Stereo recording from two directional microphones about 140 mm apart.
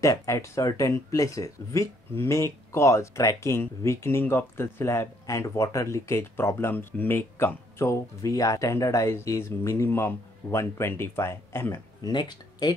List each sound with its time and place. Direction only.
0.0 s speech: 20° left (ahead or behind)
12.0 s speech: 30° left (ahead or behind)